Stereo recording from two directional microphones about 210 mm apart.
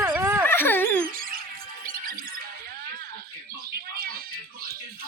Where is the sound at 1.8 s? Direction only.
40° right (ahead or behind).